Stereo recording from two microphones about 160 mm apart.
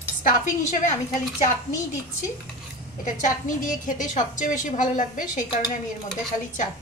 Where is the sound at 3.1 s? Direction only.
50° left (ahead or behind).